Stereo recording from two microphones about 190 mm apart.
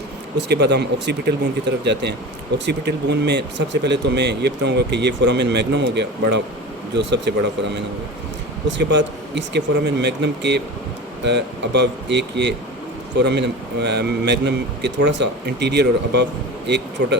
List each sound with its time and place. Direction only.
0.3 s speech: 65° right (ahead or behind)
8.6 s speech: 70° right (ahead or behind)